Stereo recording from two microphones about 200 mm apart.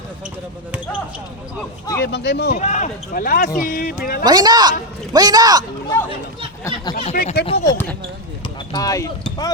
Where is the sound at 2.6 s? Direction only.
35° left (ahead or behind).